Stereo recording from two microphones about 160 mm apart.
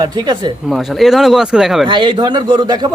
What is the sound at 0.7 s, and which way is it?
Speech, centre (ahead or behind).